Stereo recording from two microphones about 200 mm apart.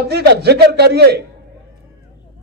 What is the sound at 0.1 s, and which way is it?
A man's voice, 55° right (ahead or behind).